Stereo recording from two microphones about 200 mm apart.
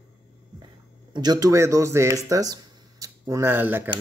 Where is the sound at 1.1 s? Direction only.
20° right (ahead or behind).